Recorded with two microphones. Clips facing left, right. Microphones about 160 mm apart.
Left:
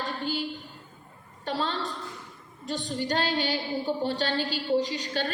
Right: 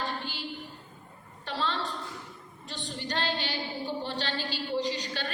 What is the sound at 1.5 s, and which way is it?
A woman's voice, 45° left (ahead or behind).